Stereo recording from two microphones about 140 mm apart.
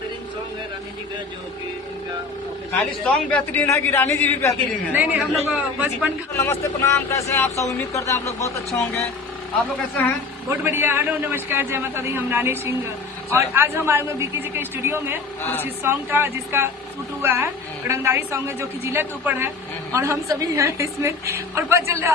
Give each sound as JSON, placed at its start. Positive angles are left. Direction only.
{"t": 3.1, "sound": "a man's voice", "side_deg": 10}
{"t": 4.9, "sound": "a woman's voice", "side_deg": -10}
{"t": 6.3, "sound": "a man's voice", "side_deg": 20}
{"t": 10.5, "sound": "a woman's voice", "side_deg": -15}